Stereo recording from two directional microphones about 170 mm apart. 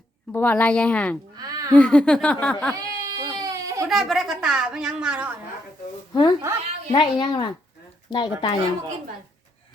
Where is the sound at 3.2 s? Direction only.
25° right (ahead or behind).